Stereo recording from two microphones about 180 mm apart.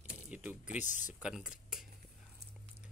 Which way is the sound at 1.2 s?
5° right (ahead or behind).